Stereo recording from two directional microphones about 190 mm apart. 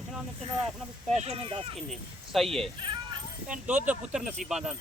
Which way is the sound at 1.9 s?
Centre (ahead or behind).